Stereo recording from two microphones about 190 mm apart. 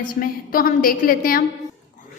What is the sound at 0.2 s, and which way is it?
A woman's voice, 50° left (ahead or behind).